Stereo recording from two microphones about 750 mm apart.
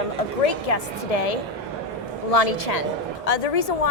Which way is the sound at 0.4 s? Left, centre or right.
Left.